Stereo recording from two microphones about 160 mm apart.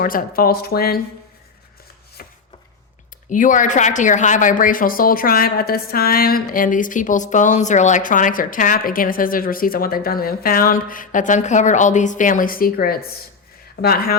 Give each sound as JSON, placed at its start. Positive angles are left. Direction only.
{"t": 0.0, "sound": "speech", "side_deg": 65}
{"t": 2.2, "sound": "chopping", "side_deg": 65}
{"t": 3.2, "sound": "speech", "side_deg": 55}